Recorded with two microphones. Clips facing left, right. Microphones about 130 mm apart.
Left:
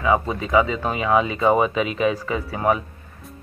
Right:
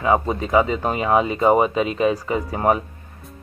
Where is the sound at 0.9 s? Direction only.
30° right (ahead or behind).